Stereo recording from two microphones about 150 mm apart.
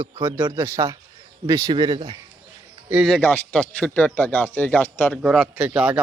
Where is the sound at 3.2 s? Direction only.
10° left (ahead or behind).